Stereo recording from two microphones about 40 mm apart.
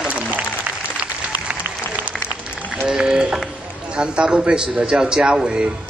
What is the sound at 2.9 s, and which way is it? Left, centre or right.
A man's voice, centre.